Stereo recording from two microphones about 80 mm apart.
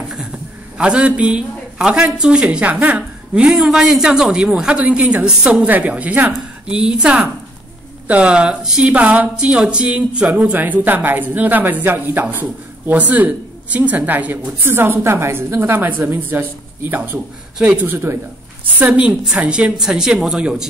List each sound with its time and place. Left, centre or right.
0.7 s a man's voice: centre; by 18.2 s right
18.8 s a man's voice: centre